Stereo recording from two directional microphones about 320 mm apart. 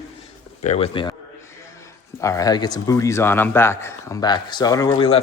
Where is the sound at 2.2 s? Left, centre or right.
Centre.